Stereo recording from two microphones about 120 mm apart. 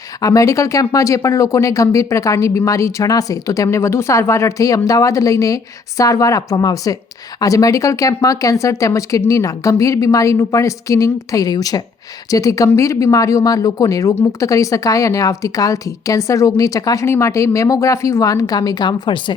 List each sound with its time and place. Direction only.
0.2 s speech: 25° left (ahead or behind)